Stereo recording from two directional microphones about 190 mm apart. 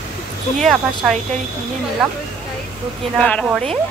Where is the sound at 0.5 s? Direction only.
Centre (ahead or behind).